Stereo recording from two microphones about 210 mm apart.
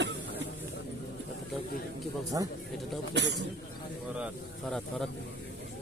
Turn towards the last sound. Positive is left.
turn(degrees=0)  # may be behind; listen again after turning